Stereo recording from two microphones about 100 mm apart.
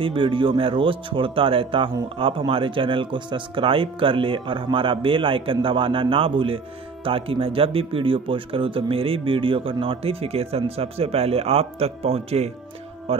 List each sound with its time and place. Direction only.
0.0 s speech: 60° right (ahead or behind); by 12.4 s 90° right
13.1 s speech: 70° right (ahead or behind)